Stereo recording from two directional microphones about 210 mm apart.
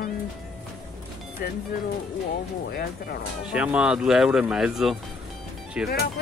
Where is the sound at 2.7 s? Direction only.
45° left (ahead or behind).